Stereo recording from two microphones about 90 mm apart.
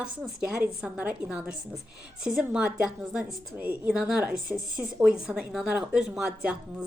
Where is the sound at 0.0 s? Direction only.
10° right (ahead or behind).